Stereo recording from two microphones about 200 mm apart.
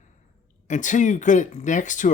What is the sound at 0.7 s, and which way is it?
Speech, 40° left (ahead or behind).